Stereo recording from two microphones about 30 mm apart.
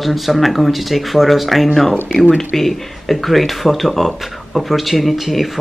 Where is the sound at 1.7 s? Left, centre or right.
Centre.